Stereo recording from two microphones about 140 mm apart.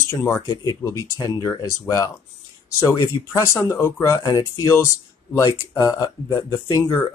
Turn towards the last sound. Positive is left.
turn(degrees=25)  # may be behind; listen again after turning